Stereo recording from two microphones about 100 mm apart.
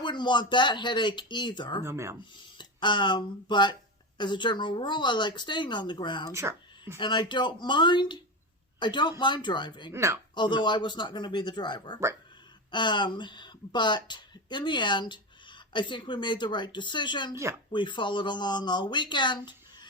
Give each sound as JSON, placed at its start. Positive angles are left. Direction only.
{"t": 0.0, "sound": "speech", "side_deg": 50}
{"t": 1.8, "sound": "speech", "side_deg": -25}
{"t": 2.3, "sound": "speech", "side_deg": 50}
{"t": 6.3, "sound": "speech", "side_deg": -25}
{"t": 7.0, "sound": "speech", "side_deg": 50}
{"t": 9.9, "sound": "speech", "side_deg": -30}
{"t": 10.3, "sound": "speech", "side_deg": 50}